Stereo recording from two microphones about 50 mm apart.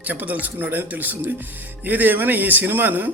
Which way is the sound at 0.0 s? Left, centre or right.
Right.